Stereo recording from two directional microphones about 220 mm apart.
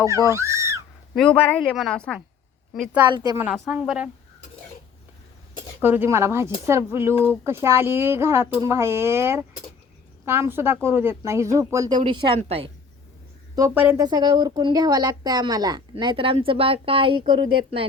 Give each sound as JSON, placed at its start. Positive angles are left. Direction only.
{"t": 0.3, "sound": "a sound", "side_deg": -15}
{"t": 1.1, "sound": "a woman's voice", "side_deg": 5}
{"t": 3.1, "sound": "speech", "side_deg": -20}
{"t": 3.4, "sound": "a woman's voice", "side_deg": -5}
{"t": 5.8, "sound": "speech", "side_deg": -10}
{"t": 13.6, "sound": "speech", "side_deg": -10}